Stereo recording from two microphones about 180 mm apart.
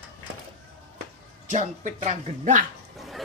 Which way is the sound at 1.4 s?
40° right (ahead or behind).